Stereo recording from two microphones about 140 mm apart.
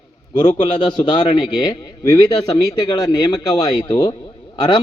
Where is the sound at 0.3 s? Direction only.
30° left (ahead or behind).